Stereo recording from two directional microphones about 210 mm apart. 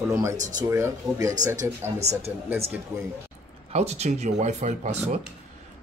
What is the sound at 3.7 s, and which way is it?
Speech, 30° right (ahead or behind).